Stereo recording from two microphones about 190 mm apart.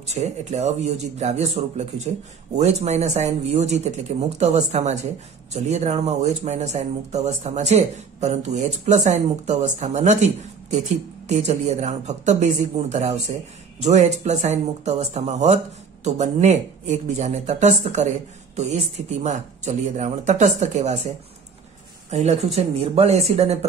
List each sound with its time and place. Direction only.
0.0 s speech: 35° right (ahead or behind)
22.1 s speech: 35° right (ahead or behind)